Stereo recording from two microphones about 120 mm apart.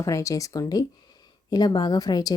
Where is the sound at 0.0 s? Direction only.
25° left (ahead or behind).